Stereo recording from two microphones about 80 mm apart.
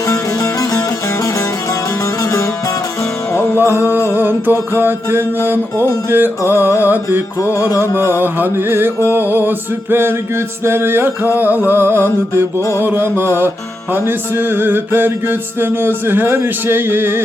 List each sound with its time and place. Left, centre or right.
3.3 s music: left
3.7 s music: right
4.8 s mantra: right
8.2 s mantra: right